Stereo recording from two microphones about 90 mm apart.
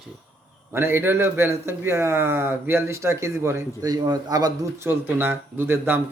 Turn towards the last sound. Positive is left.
turn(degrees=-25)  # may be behind; listen again after turning